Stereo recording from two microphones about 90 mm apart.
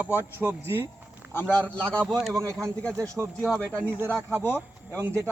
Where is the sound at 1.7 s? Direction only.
15° left (ahead or behind).